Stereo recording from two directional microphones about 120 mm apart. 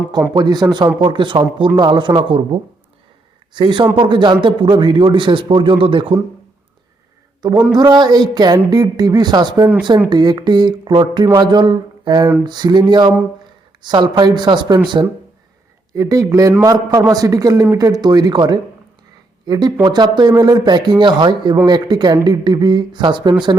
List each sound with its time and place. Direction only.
0.3 s a man's voice: 35° right (ahead or behind)
7.7 s speech: 35° right (ahead or behind)
15.9 s speech: 30° right (ahead or behind)